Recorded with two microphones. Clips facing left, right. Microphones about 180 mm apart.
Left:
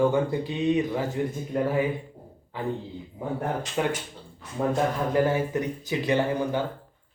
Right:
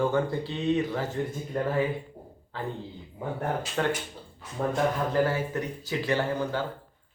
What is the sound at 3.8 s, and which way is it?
Speech, 10° left (ahead or behind).